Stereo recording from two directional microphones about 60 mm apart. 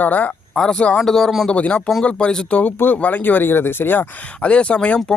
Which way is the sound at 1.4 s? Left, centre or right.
Centre.